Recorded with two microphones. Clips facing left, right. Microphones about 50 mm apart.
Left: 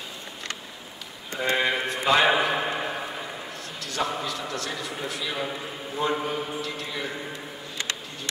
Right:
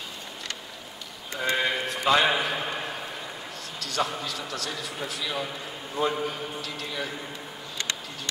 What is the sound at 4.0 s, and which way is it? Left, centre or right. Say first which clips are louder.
A man's voice: left 1 dB; left.